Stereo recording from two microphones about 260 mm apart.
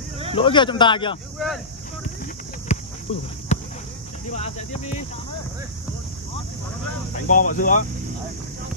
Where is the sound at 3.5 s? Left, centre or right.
Left.